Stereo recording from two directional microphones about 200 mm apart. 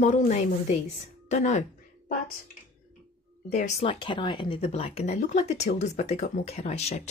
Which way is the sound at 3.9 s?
25° left (ahead or behind).